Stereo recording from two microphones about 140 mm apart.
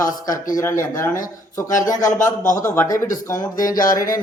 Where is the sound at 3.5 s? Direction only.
75° left (ahead or behind).